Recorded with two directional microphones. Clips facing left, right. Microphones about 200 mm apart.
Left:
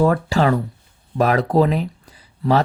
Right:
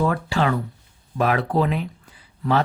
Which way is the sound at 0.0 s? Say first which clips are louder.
Left 5 dB; 40° left (ahead or behind).